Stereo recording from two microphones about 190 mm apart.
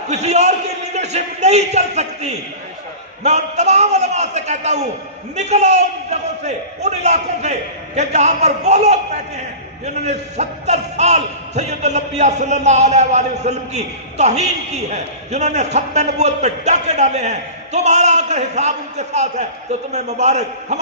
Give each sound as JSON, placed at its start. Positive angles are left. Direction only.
{"t": 0.1, "sound": "a man's voice", "side_deg": -35}